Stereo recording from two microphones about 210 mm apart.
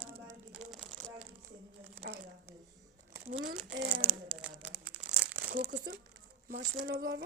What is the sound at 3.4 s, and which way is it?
Crumpling, 45° right (ahead or behind).